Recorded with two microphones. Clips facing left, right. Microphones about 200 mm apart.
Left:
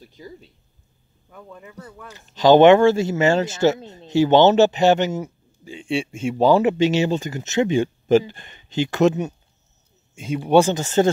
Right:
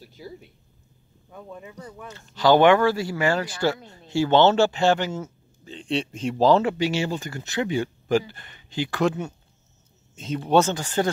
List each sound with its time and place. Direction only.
0.0 s speech: 10° right (ahead or behind)
1.3 s speech: 20° right (ahead or behind)
2.1 s speech: 20° left (ahead or behind)
6.6 s speech: 20° left (ahead or behind)
10.1 s speech: 10° left (ahead or behind)